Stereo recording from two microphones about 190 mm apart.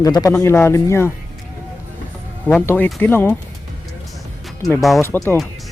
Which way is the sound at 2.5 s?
10° left (ahead or behind).